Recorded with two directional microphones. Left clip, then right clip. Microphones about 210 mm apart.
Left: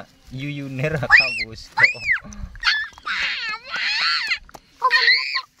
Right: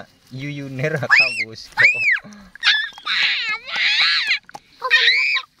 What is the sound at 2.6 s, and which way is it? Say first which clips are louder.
Dog: right 3 dB; 50° right (ahead or behind).